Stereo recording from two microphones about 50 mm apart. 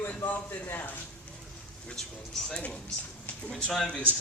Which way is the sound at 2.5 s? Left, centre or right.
Left.